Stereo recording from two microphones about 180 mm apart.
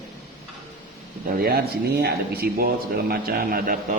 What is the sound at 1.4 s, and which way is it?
Speech, 60° right (ahead or behind).